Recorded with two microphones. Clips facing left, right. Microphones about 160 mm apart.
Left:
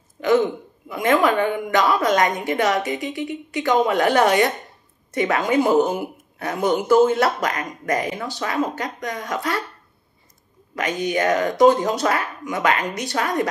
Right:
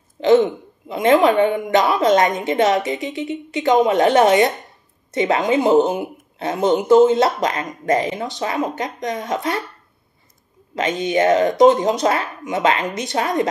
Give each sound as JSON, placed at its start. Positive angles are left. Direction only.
{"t": 0.2, "sound": "speech", "side_deg": -25}
{"t": 10.8, "sound": "speech", "side_deg": -25}